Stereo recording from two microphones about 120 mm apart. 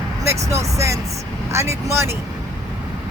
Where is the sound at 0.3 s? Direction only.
25° right (ahead or behind).